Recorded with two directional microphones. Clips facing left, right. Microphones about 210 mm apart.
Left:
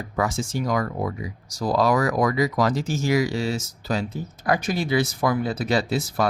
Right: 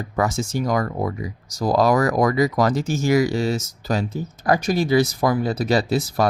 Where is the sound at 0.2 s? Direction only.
40° right (ahead or behind).